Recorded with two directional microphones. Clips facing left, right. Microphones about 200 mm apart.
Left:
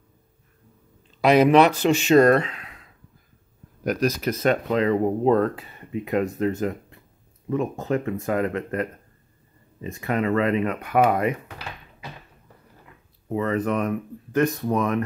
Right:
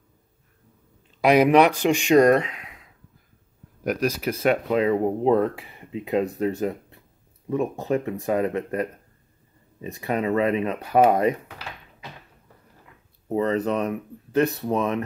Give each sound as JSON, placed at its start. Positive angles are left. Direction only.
{"t": 1.2, "sound": "speech", "side_deg": -10}
{"t": 7.4, "sound": "speech", "side_deg": -15}
{"t": 9.9, "sound": "speech", "side_deg": -15}
{"t": 13.3, "sound": "speech", "side_deg": -30}